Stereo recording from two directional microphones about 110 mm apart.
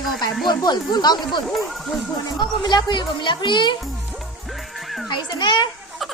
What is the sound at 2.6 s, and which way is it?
A woman's voice, 40° left (ahead or behind).